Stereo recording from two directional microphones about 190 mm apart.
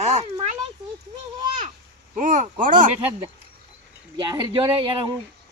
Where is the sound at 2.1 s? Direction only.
40° right (ahead or behind).